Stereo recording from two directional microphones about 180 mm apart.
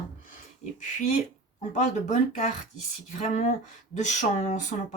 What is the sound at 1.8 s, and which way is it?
Speech, 45° left (ahead or behind).